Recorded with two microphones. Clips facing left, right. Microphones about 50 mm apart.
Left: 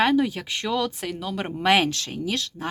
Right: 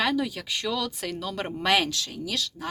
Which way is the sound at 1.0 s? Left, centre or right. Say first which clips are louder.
Left 2 dB; centre.